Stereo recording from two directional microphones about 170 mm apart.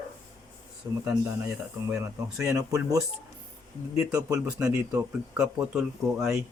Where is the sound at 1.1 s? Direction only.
5° right (ahead or behind).